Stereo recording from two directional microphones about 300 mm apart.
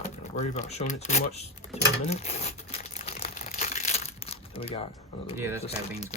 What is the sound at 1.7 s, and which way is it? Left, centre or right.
Crumpling, left.